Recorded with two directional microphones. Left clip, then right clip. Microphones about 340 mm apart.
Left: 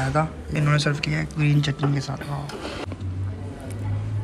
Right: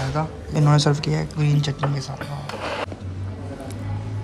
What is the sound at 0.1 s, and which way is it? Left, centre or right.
Speech, centre.